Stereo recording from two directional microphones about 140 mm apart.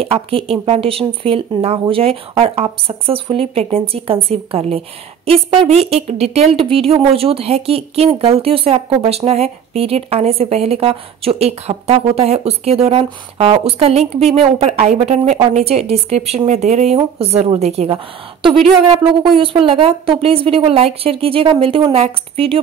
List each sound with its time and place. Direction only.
0.0 s a woman's voice: 40° right (ahead or behind)